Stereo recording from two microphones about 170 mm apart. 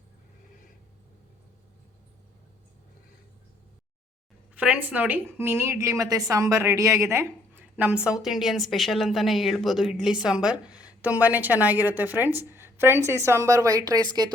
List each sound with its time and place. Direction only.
4.5 s a woman's voice: 10° right (ahead or behind); by 14.3 s 25° right (ahead or behind)